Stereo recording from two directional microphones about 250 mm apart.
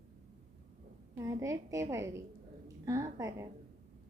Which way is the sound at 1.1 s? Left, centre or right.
Centre.